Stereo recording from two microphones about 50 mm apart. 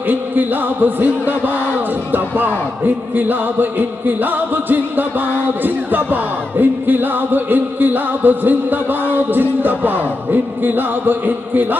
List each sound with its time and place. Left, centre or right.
0.1 s music: right